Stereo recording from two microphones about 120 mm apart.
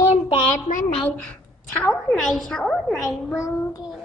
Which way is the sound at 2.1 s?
Centre (ahead or behind).